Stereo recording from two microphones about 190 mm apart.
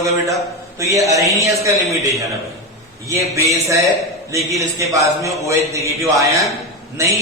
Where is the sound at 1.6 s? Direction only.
15° right (ahead or behind).